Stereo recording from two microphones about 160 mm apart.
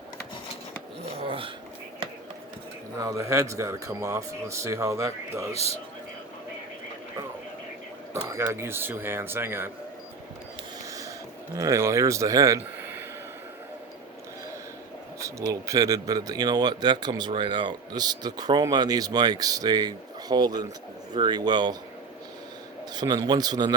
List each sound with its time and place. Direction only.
1.2 s a sound: 35° right (ahead or behind)
3.0 s speech: 20° right (ahead or behind)
5.5 s a man's voice: 40° left (ahead or behind)
8.1 s speech: 20° right (ahead or behind)
11.5 s speech: 20° right (ahead or behind)
12.8 s a sound: 15° right (ahead or behind)
15.6 s speech: 20° right (ahead or behind)
23.0 s speech: 25° right (ahead or behind)